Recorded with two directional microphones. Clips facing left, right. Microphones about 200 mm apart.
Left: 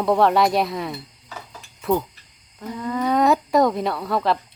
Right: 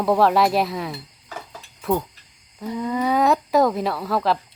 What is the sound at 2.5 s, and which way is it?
Speech, 10° right (ahead or behind).